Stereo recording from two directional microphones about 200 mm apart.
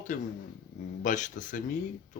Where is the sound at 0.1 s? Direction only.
40° left (ahead or behind).